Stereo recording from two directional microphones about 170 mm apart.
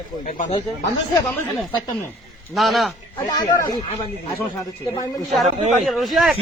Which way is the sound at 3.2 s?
25° left (ahead or behind).